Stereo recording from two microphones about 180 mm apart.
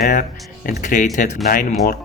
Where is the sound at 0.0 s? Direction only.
50° left (ahead or behind).